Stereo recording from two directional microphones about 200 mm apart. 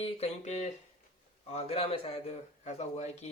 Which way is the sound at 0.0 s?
30° left (ahead or behind).